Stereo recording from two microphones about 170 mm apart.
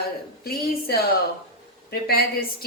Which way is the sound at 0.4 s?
65° left (ahead or behind).